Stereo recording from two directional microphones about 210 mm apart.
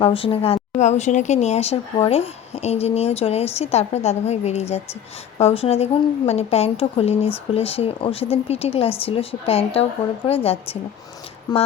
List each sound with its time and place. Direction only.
0.0 s speech: 25° left (ahead or behind)